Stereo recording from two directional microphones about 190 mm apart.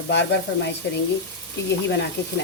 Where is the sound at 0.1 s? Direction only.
65° left (ahead or behind).